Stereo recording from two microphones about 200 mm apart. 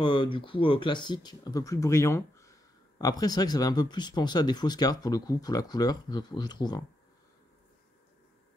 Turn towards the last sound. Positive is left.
turn(degrees=20)  # may be behind; listen again after turning